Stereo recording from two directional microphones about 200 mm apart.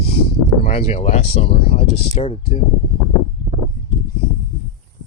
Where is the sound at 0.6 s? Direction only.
30° left (ahead or behind).